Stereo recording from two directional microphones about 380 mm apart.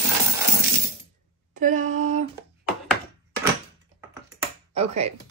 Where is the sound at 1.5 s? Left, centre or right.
Centre.